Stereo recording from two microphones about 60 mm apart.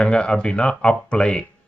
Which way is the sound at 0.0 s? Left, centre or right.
Centre.